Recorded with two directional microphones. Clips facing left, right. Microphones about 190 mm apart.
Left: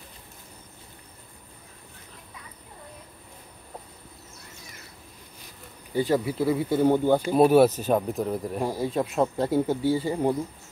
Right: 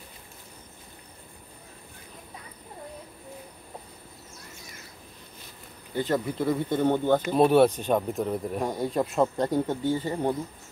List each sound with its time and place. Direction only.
5.9 s speech: 10° left (ahead or behind)